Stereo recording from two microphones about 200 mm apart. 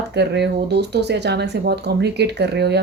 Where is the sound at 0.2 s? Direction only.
55° right (ahead or behind).